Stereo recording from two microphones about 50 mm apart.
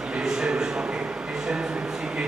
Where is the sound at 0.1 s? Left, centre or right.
Centre.